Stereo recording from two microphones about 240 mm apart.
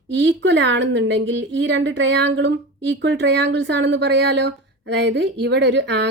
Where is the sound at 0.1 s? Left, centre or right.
Right.